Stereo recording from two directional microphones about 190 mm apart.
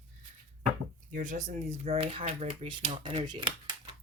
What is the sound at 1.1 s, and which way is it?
Speech, 45° right (ahead or behind).